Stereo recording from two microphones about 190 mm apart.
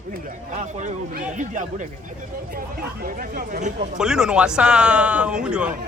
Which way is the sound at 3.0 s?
50° right (ahead or behind).